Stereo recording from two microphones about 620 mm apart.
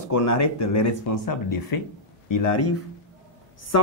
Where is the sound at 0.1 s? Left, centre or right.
Left.